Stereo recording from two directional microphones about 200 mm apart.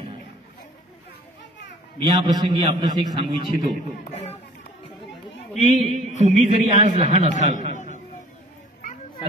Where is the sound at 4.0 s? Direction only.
30° left (ahead or behind).